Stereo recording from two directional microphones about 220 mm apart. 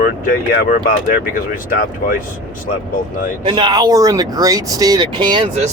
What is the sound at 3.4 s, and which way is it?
Speech, 20° right (ahead or behind).